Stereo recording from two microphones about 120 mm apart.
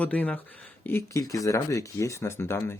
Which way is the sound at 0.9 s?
25° left (ahead or behind).